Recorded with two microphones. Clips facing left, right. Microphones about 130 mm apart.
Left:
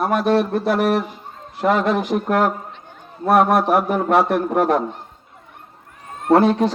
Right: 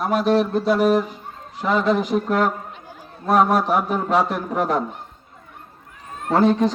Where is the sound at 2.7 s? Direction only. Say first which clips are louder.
Right 1 dB; 5° right (ahead or behind).